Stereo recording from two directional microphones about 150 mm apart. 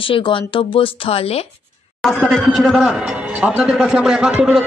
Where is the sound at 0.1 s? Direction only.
35° left (ahead or behind).